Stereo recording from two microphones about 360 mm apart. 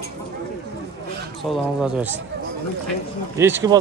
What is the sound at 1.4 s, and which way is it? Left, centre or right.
Speech, centre.